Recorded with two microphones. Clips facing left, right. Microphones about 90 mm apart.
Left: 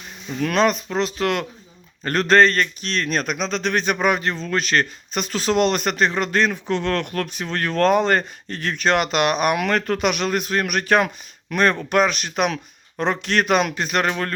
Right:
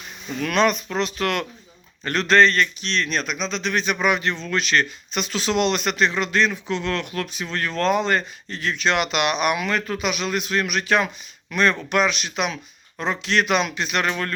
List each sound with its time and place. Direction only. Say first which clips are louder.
0.3 s speech: left 1 dB; 35° left (ahead or behind)
2.0 s speech: left 2 dB; 45° left (ahead or behind)
9.6 s speech: left 4 dB; 55° left (ahead or behind); by 14.3 s 35° left (ahead or behind)